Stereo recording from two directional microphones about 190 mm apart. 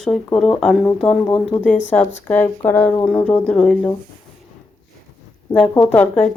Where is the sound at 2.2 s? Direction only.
10° left (ahead or behind).